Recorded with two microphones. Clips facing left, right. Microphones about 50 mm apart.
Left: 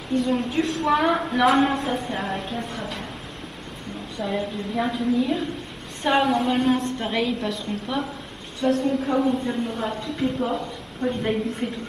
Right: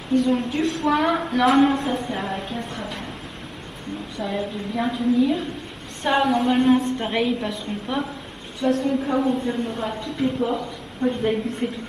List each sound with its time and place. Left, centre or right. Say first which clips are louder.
0.2 s a woman's voice: right 2 dB; centre
4.2 s a woman's voice: left 1 dB; centre